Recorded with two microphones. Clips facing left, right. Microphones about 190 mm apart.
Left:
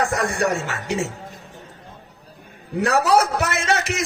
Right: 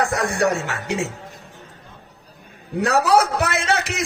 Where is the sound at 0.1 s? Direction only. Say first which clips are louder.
Right 1 dB; 65° right (ahead or behind).